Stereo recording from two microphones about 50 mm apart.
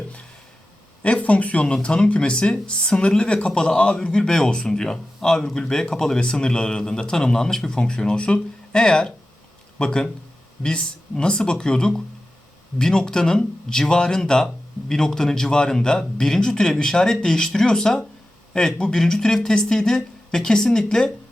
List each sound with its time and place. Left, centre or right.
1.0 s speech: left